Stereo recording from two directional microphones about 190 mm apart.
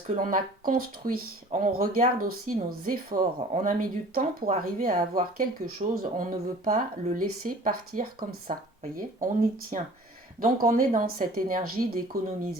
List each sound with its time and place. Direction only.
0.1 s speech: 45° right (ahead or behind)